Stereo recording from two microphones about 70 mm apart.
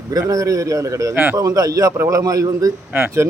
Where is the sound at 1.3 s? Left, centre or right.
Right.